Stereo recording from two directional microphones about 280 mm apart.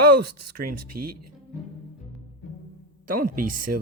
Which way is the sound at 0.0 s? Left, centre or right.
Right.